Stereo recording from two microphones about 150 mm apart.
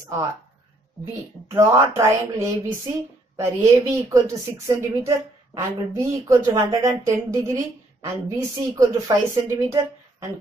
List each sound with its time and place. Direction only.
0.0 s speech: 20° right (ahead or behind)
1.5 s speech: 20° right (ahead or behind)
8.7 s speech: 20° right (ahead or behind)